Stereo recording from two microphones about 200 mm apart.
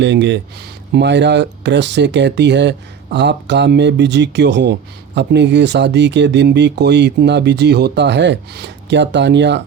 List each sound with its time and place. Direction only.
0.0 s speech: 60° right (ahead or behind)